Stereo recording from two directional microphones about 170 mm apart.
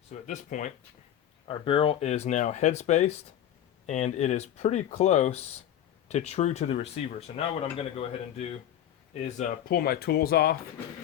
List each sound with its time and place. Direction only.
0.1 s speech: 45° left (ahead or behind)
1.5 s speech: 30° left (ahead or behind)
9.6 s speech: 65° left (ahead or behind)